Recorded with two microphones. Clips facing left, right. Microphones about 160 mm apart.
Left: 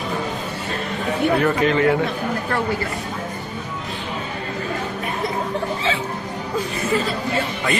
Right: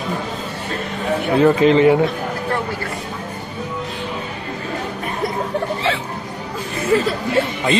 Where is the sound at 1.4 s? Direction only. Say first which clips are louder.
Right 10 dB; 25° right (ahead or behind).